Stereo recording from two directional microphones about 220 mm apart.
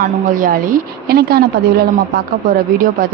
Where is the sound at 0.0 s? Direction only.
40° right (ahead or behind).